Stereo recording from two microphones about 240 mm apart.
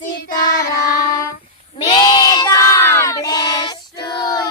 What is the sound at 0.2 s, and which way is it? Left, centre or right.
Child singing, left.